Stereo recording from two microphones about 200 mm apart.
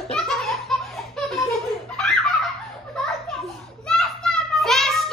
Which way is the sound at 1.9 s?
5° left (ahead or behind).